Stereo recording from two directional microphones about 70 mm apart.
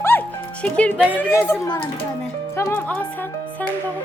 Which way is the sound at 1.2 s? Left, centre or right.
Left.